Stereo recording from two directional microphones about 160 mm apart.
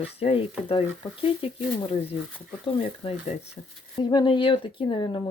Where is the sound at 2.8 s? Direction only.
35° left (ahead or behind).